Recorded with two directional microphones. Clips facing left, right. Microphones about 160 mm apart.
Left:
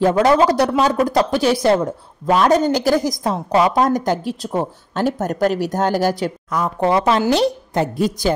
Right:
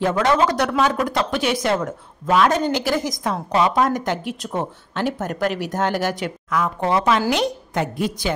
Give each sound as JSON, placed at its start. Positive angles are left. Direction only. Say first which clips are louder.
{"t": 0.2, "sound": "speech", "louder": "left 3 dB", "side_deg": 35}